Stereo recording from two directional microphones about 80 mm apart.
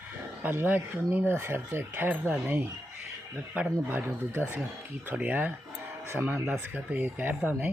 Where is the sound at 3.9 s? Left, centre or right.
Right.